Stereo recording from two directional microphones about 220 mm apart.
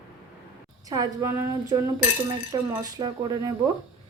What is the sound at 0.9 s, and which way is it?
Speech, 15° right (ahead or behind).